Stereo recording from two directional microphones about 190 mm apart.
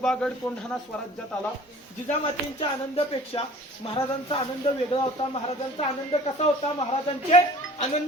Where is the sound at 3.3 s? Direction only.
25° left (ahead or behind).